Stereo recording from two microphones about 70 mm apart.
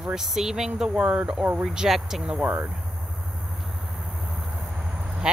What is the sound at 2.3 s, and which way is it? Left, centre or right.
Speech, right.